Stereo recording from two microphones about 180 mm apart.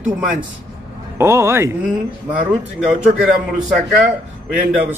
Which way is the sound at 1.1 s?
15° right (ahead or behind).